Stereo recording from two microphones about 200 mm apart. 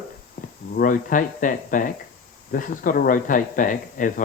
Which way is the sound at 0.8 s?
40° left (ahead or behind).